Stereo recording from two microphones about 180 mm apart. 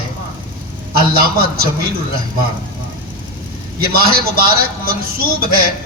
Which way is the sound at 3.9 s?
55° right (ahead or behind).